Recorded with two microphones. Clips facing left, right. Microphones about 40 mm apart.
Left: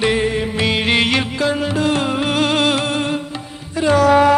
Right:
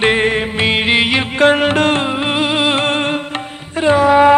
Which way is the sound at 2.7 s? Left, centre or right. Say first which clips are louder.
Right 3 dB; right.